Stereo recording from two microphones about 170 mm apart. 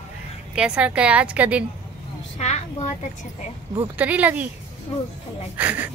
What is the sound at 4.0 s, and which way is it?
Speech, 10° right (ahead or behind).